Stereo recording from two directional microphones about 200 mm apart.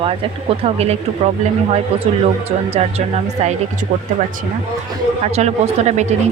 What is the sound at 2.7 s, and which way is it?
Speech, 30° right (ahead or behind).